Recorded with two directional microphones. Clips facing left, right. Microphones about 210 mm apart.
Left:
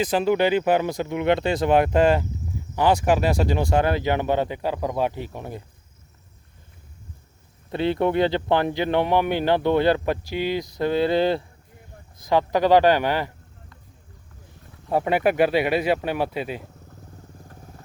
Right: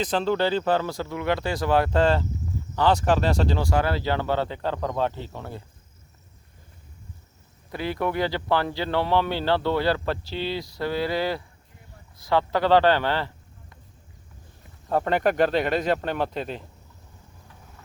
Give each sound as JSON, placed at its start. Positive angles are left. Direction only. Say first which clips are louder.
{"t": 0.0, "sound": "speech", "louder": "left 3 dB", "side_deg": 10}
{"t": 7.7, "sound": "speech", "louder": "left 6 dB", "side_deg": 25}
{"t": 14.8, "sound": "speech", "louder": "left 2 dB", "side_deg": 10}
{"t": 17.5, "sound": "vehicle", "louder": "left 6 dB", "side_deg": 45}